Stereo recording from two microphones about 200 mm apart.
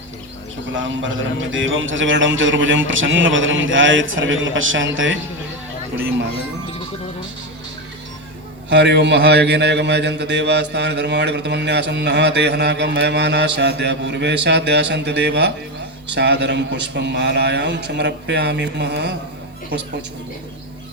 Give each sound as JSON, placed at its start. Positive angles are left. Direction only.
{"t": 0.7, "sound": "a man's voice", "side_deg": -70}
{"t": 8.7, "sound": "a man's voice", "side_deg": -60}